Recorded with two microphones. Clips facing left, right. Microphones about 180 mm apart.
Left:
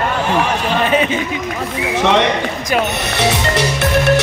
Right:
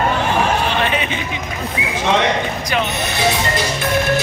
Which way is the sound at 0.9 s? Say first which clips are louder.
Left 6 dB; 40° left (ahead or behind).